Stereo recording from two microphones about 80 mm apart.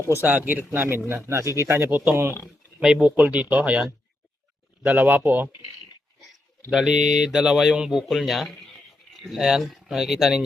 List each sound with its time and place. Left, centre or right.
0.1 s speech: right
2.8 s speech: centre
6.7 s speech: centre
8.4 s a sound: centre
9.2 s speech: centre